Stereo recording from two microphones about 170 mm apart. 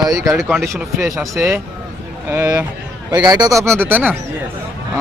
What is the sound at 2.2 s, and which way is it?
Speech, 15° right (ahead or behind).